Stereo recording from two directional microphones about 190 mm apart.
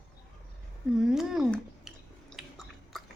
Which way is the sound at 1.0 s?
Centre (ahead or behind).